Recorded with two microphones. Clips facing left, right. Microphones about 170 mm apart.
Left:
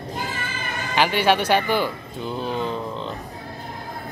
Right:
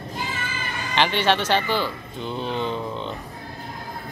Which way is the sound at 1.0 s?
10° left (ahead or behind).